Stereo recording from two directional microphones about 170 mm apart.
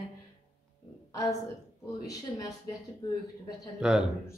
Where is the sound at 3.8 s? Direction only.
5° right (ahead or behind).